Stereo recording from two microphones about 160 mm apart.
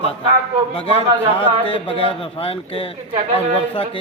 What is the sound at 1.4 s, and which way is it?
Speech, 35° left (ahead or behind).